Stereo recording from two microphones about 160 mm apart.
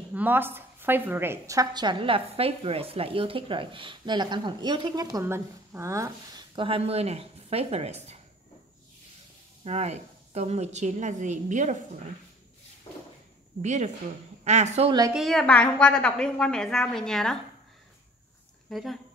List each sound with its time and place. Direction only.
0.1 s a woman's voice: 10° right (ahead or behind)
5.2 s speech: 15° right (ahead or behind); by 8.2 s 40° right (ahead or behind)
9.7 s a woman's voice: 40° right (ahead or behind)
13.6 s a woman's voice: 45° right (ahead or behind)
14.9 s a woman's voice: 25° right (ahead or behind)
15.1 s a woman's voice: centre (ahead or behind)
18.7 s speech: centre (ahead or behind)